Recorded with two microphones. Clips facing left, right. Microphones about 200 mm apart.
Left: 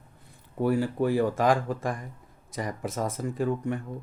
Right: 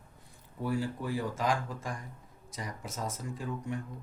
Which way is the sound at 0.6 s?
65° left (ahead or behind).